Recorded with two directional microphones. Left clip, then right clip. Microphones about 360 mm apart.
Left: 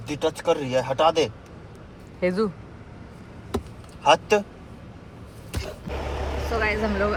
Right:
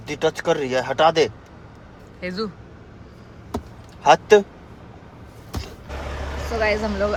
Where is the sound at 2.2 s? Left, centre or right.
Centre.